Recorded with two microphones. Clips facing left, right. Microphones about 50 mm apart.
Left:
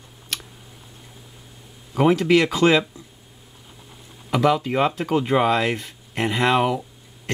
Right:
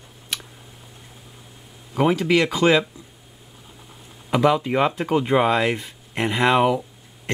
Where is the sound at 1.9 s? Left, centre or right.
Centre.